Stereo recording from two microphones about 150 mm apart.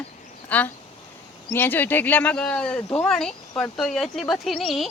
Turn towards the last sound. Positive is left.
turn(degrees=0)  # may be behind; listen again after turning